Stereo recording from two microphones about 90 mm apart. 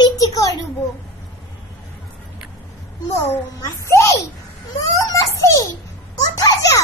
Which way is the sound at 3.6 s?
35° left (ahead or behind).